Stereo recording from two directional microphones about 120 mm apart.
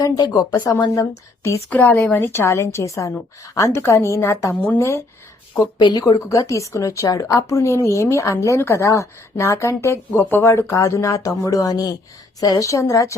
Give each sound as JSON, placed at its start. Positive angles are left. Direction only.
{"t": 0.0, "sound": "speech", "side_deg": 30}
{"t": 1.7, "sound": "a woman's voice", "side_deg": 15}
{"t": 5.8, "sound": "a woman's voice", "side_deg": 35}